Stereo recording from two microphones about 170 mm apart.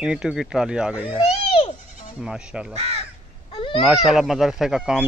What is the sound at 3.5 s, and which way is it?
Babbling, 30° left (ahead or behind).